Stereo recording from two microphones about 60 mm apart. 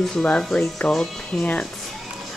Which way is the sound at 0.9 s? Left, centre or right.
Centre.